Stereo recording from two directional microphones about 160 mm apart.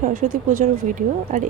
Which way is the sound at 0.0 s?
60° right (ahead or behind).